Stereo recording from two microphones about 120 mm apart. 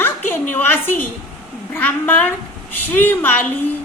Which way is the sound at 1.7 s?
15° left (ahead or behind).